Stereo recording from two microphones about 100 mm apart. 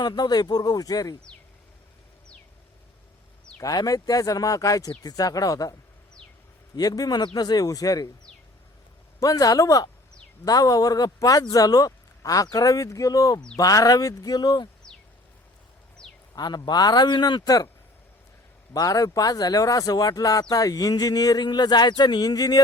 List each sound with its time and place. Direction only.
0.0 s speech: 45° left (ahead or behind)
3.6 s speech: 35° left (ahead or behind)
6.7 s speech: 40° left (ahead or behind)
9.2 s speech: 35° left (ahead or behind)
16.3 s a man's voice: 45° left (ahead or behind)
18.7 s speech: 40° left (ahead or behind)